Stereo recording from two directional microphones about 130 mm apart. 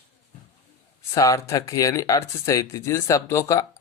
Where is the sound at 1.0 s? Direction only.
25° left (ahead or behind).